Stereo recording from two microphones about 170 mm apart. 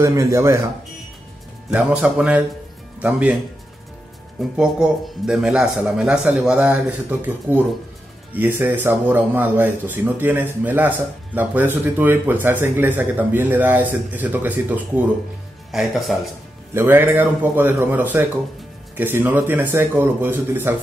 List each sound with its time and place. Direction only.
0.0 s speech: 15° right (ahead or behind)
1.7 s a man's voice: 5° right (ahead or behind)
4.4 s a man's voice: 5° right (ahead or behind)
16.7 s speech: 15° right (ahead or behind)